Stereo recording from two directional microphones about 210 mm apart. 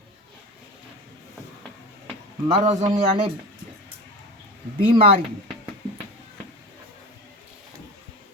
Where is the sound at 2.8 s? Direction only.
20° right (ahead or behind).